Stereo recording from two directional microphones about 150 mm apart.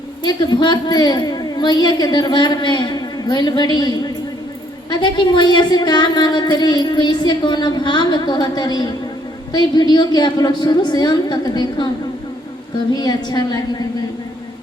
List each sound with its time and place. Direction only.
0.2 s a woman's voice: 30° left (ahead or behind)
12.9 s a woman's voice: 25° left (ahead or behind)